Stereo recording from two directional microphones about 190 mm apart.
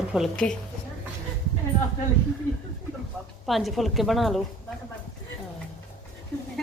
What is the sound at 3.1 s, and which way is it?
Speech, 5° left (ahead or behind).